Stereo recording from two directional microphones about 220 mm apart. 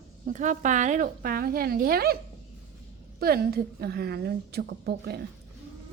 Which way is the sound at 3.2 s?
45° right (ahead or behind).